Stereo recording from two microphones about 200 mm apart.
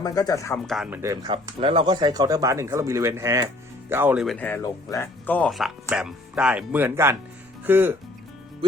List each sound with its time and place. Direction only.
0.0 s speech: 20° left (ahead or behind)
0.7 s speech: 5° right (ahead or behind)